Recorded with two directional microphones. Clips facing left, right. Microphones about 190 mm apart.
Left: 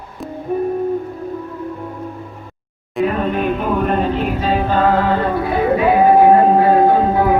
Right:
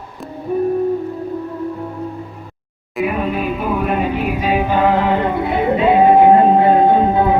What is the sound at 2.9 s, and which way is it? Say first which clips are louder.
Music: left 1 dB; 10° right (ahead or behind).